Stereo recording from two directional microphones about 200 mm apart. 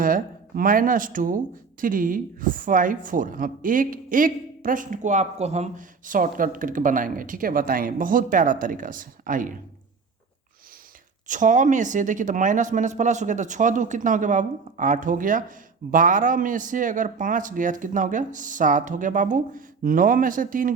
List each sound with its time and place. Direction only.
0.0 s a woman's voice: 45° right (ahead or behind)
11.3 s speech: 40° right (ahead or behind)